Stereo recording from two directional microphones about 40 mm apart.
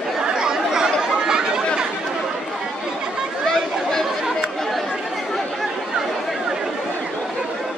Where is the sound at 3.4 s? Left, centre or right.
Centre.